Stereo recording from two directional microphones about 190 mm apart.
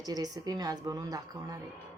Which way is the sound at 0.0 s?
20° right (ahead or behind).